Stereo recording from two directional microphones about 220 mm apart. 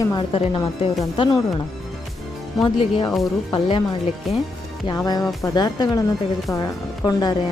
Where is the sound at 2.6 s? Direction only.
20° left (ahead or behind).